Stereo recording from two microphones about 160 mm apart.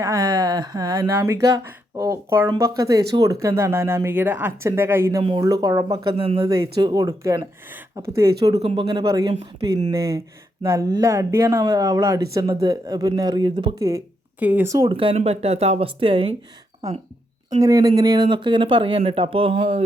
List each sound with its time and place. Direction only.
0.0 s speech: 20° right (ahead or behind)
6.1 s speech: 35° right (ahead or behind)
6.5 s speech: 25° right (ahead or behind)
14.3 s speech: 10° right (ahead or behind)
14.8 s speech: 35° right (ahead or behind)
17.5 s speech: 20° right (ahead or behind)